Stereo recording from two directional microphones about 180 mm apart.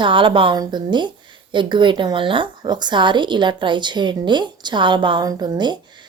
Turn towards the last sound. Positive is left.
turn(degrees=-25)  # may be behind; listen again after turning